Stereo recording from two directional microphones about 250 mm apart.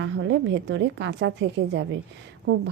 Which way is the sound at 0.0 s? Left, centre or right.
Right.